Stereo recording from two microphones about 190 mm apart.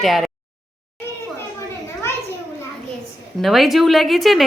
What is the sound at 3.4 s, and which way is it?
A woman's voice, centre (ahead or behind).